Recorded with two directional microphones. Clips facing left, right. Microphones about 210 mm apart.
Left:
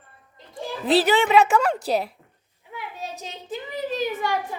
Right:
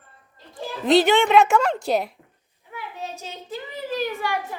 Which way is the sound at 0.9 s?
5° left (ahead or behind).